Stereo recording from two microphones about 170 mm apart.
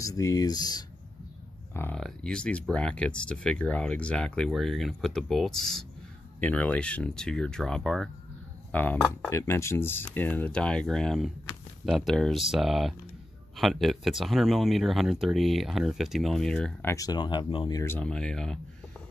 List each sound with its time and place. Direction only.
0.0 s speech: 20° left (ahead or behind)
2.0 s speech: 5° left (ahead or behind)
9.3 s speech: 15° left (ahead or behind)
16.9 s speech: 20° left (ahead or behind); by 19.0 s 5° left (ahead or behind)